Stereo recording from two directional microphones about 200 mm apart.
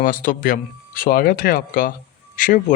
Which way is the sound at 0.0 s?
45° left (ahead or behind).